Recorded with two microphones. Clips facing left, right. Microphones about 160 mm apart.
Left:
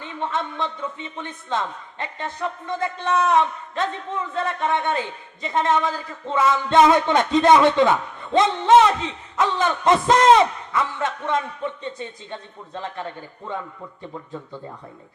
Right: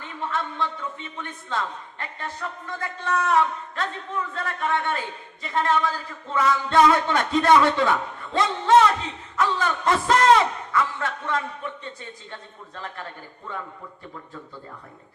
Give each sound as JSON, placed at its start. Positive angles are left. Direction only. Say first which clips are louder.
{"t": 0.0, "sound": "speech", "louder": "left 3 dB", "side_deg": 20}